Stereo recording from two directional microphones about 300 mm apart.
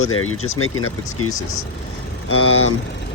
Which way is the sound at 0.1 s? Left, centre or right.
Left.